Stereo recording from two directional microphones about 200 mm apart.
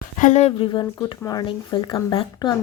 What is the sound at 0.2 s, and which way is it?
Speech, 35° left (ahead or behind).